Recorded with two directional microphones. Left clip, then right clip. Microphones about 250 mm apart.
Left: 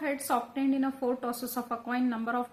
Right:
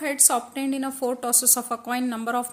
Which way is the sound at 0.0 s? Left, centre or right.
Right.